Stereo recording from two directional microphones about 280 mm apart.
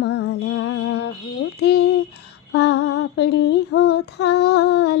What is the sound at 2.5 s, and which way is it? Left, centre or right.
Female singing, left.